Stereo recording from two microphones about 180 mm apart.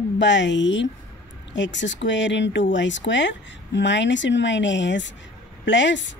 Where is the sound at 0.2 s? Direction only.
80° left.